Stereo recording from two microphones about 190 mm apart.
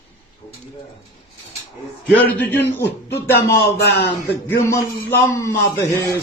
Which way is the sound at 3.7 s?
60° left (ahead or behind).